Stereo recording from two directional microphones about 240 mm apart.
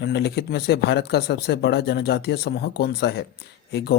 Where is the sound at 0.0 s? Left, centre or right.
Left.